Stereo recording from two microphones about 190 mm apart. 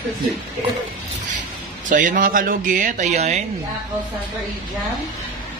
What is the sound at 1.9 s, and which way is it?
Speech, 45° right (ahead or behind).